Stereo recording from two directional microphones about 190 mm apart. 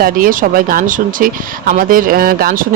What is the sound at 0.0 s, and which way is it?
Speech, 45° right (ahead or behind).